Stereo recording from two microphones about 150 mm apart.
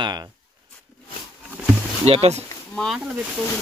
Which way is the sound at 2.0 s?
45° right (ahead or behind).